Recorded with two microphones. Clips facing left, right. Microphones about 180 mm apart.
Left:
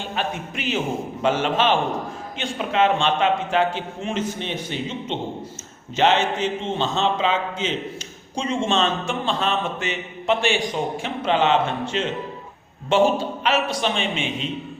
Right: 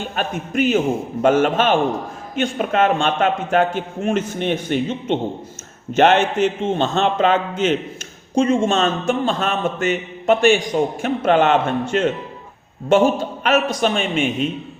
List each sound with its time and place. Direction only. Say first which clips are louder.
0.0 s a man's voice: right 3 dB; 50° right (ahead or behind)